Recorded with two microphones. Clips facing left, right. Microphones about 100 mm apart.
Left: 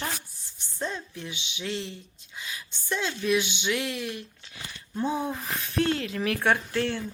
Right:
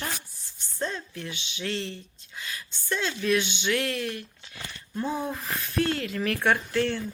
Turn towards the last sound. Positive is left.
turn(degrees=25)  # may be behind; listen again after turning